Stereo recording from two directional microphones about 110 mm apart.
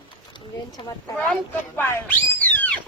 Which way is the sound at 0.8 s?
45° left (ahead or behind).